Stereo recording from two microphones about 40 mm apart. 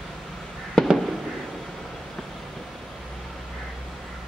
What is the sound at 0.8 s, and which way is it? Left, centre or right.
Fireworks, centre.